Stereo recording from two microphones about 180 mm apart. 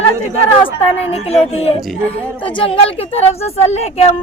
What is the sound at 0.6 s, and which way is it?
A woman's voice, 35° left (ahead or behind).